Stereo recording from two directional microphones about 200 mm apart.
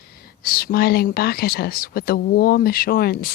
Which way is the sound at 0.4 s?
50° left (ahead or behind).